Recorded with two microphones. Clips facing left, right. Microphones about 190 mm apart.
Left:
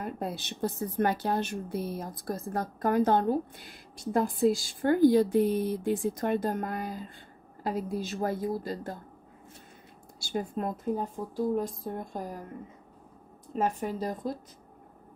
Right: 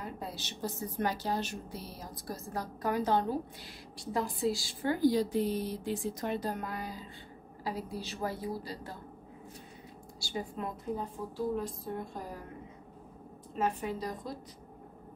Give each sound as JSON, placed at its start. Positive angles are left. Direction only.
{"t": 0.0, "sound": "speech", "side_deg": 55}
{"t": 10.2, "sound": "speech", "side_deg": 50}
{"t": 13.6, "sound": "speech", "side_deg": 45}